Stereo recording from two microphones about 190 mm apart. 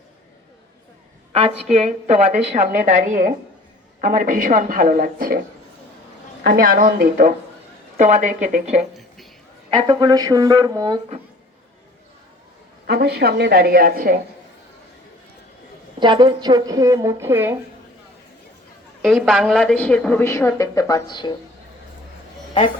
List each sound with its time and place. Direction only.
1.3 s a woman's voice: 30° right (ahead or behind); by 5.4 s 50° right (ahead or behind)
6.4 s a woman's voice: 50° right (ahead or behind)
7.9 s a woman's voice: 40° right (ahead or behind)
9.6 s speech: 25° right (ahead or behind)
12.9 s a woman's voice: 60° right (ahead or behind)
16.0 s a woman's voice: 25° right (ahead or behind)
19.0 s a woman's voice: centre (ahead or behind); by 21.3 s 25° left (ahead or behind)